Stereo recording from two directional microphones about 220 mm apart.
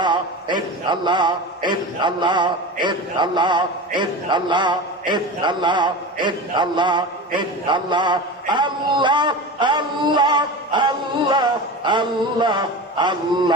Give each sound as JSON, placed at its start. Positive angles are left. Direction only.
{"t": 0.0, "sound": "a man's voice", "side_deg": -20}